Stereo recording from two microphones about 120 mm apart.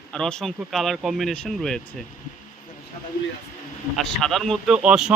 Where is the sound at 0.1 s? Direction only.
5° left (ahead or behind).